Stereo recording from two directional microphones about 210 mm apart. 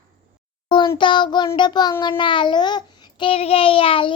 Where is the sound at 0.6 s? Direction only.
20° left (ahead or behind).